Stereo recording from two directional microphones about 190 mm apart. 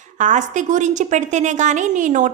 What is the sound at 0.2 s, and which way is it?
A woman's voice, 40° right (ahead or behind).